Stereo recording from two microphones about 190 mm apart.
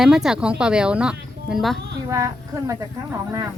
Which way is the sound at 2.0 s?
15° right (ahead or behind).